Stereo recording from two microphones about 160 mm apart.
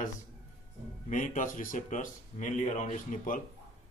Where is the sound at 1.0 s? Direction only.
55° left (ahead or behind).